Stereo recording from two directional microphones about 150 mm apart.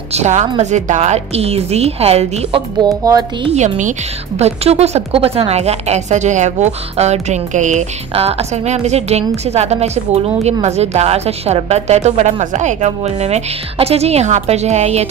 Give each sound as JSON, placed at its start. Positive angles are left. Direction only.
{"t": 0.1, "sound": "a woman's voice", "side_deg": -50}
{"t": 2.8, "sound": "a woman's voice", "side_deg": -25}
{"t": 3.4, "sound": "a woman's voice", "side_deg": -50}